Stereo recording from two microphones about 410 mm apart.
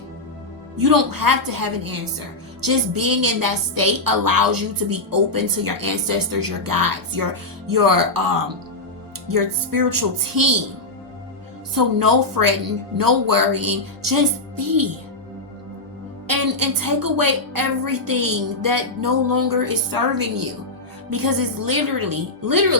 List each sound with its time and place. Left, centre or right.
0.8 s a woman's voice: right
11.7 s a woman's voice: right
16.3 s a woman's voice: right